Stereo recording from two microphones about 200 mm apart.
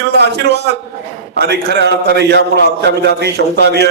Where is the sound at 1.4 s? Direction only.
55° right (ahead or behind).